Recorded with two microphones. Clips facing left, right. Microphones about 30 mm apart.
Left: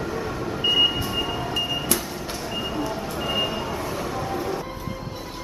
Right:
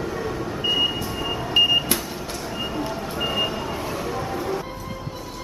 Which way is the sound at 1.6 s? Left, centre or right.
Right.